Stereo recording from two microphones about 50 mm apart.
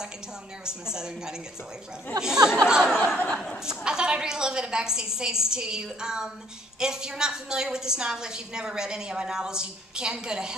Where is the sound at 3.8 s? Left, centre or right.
Centre.